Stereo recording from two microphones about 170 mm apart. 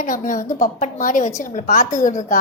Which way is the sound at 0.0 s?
50° left (ahead or behind).